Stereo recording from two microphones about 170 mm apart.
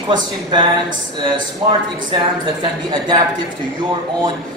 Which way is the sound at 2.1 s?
25° right (ahead or behind).